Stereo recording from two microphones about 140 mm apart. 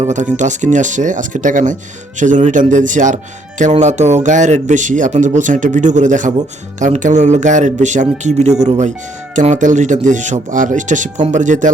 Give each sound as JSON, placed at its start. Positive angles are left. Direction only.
{"t": 0.3, "sound": "speech", "side_deg": -60}